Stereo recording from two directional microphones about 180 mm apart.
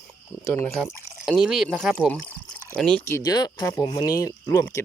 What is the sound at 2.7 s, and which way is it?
Speech, 5° left (ahead or behind).